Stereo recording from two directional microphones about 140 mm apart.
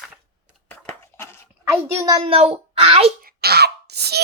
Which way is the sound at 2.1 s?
45° right (ahead or behind).